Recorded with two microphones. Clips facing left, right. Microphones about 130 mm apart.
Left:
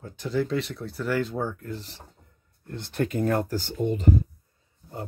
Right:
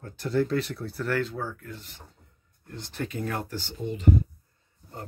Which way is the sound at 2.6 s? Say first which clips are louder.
Left 6 dB; 60° left (ahead or behind).